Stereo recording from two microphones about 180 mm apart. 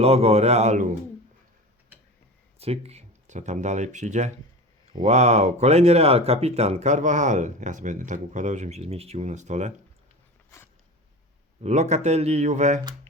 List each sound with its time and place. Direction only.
0.0 s speech: 35° right (ahead or behind)
2.6 s speech: 35° right (ahead or behind)
11.6 s speech: 40° right (ahead or behind)